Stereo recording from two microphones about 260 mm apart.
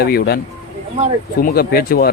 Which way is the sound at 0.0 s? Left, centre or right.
Left.